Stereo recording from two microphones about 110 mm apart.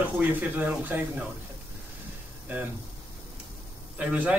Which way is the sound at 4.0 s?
10° right (ahead or behind).